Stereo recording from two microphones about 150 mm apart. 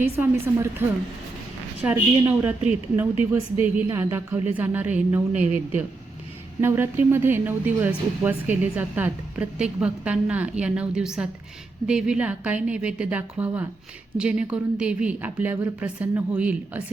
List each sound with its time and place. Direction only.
0.0 s a woman's voice: 15° right (ahead or behind)